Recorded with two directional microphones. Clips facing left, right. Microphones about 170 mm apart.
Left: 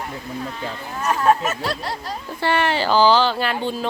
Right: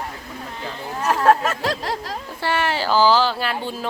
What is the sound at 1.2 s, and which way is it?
Speech, 90° right.